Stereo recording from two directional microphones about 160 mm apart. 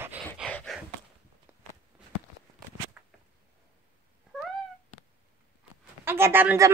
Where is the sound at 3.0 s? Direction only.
5° right (ahead or behind).